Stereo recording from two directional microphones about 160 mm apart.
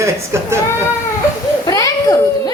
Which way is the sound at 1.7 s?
20° left (ahead or behind).